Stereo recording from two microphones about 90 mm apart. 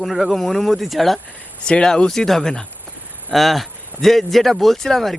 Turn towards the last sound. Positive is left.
turn(degrees=5)  # may be behind; listen again after turning